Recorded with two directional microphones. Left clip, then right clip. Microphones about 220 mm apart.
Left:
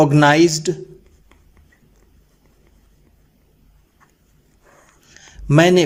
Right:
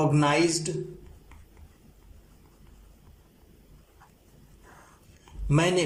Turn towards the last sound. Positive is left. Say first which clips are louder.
# left 12 dB
turn(degrees=35)  # may be behind; listen again after turning